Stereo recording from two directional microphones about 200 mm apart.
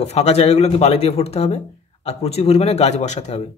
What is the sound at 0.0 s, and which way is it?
Speech, 30° left (ahead or behind).